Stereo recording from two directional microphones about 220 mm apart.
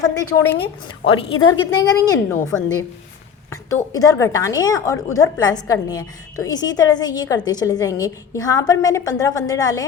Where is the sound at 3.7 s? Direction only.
15° left (ahead or behind).